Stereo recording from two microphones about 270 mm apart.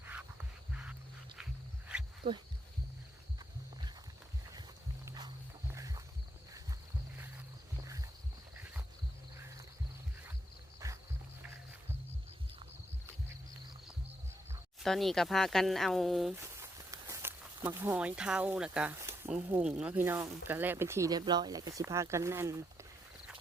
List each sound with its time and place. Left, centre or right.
0.0 s a sound: centre
5.0 s wild animals: centre
5.7 s walk: centre
7.9 s walk: centre
10.8 s music: centre
14.5 s speech: centre